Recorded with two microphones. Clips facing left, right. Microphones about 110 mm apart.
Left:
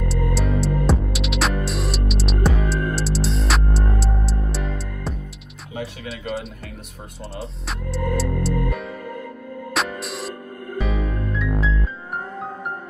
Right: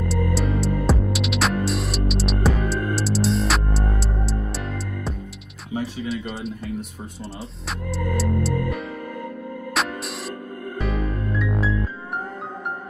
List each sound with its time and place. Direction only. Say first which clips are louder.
0.1 s music: even; centre (ahead or behind)
5.7 s music: right 4 dB; 30° right (ahead or behind)
6.0 s a sound: right 1 dB; centre (ahead or behind)
7.3 s speech: left 4 dB; centre (ahead or behind)
9.8 s music: left 1 dB; centre (ahead or behind)